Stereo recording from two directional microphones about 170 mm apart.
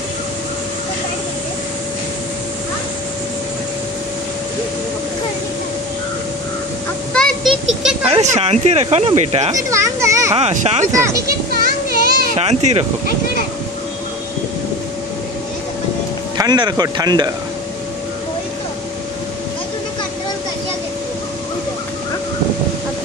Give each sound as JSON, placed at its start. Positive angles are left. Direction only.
{"t": 7.2, "sound": "a sound", "side_deg": 0}
{"t": 8.0, "sound": "speech", "side_deg": -35}
{"t": 9.5, "sound": "a child's voice", "side_deg": -20}
{"t": 10.3, "sound": "speech", "side_deg": -40}
{"t": 11.9, "sound": "children playing", "side_deg": -65}
{"t": 12.4, "sound": "speech", "side_deg": -40}
{"t": 16.3, "sound": "speech", "side_deg": -25}